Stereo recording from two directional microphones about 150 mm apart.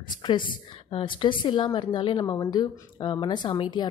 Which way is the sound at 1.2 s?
30° left (ahead or behind).